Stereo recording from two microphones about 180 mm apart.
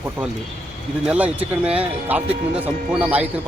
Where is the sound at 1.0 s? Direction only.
10° right (ahead or behind).